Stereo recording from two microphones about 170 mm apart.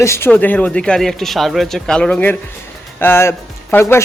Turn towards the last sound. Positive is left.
turn(degrees=15)  # may be behind; listen again after turning